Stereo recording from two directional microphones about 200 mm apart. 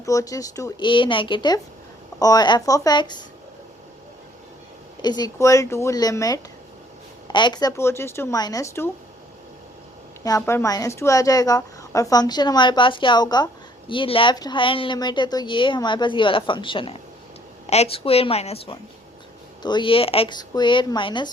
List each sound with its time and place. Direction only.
0.0 s a woman's voice: 15° left (ahead or behind)
5.0 s speech: 20° left (ahead or behind)
10.2 s a woman's voice: 15° left (ahead or behind)